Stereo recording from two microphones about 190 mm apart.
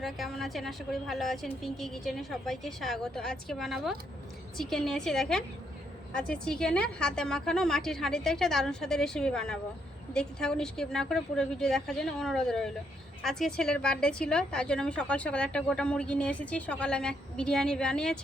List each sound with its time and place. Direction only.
0.0 s a woman's voice: centre (ahead or behind)